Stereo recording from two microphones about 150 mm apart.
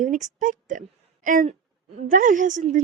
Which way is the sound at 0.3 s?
60° right (ahead or behind).